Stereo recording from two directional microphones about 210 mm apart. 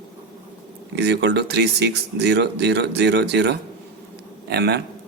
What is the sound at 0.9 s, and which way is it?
Speech, 55° right (ahead or behind).